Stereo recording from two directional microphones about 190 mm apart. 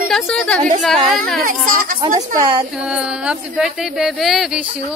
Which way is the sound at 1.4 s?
45° right (ahead or behind).